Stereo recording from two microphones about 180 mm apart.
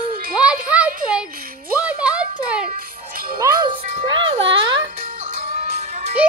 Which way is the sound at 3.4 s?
25° right (ahead or behind).